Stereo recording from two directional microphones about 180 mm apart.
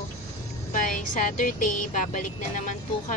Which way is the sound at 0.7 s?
45° left (ahead or behind).